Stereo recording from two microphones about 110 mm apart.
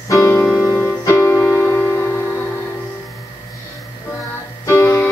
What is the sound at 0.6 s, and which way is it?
Music, 20° left (ahead or behind).